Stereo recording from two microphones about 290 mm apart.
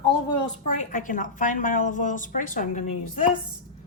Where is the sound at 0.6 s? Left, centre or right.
Left.